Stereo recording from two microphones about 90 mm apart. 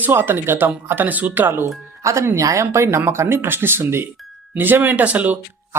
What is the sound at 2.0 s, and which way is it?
Speech, 35° right (ahead or behind).